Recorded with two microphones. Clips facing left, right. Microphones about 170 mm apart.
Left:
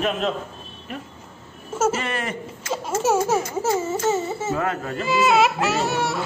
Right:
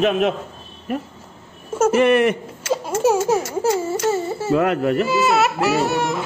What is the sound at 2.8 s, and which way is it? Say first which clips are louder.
Speech: right 3 dB; 10° right (ahead or behind).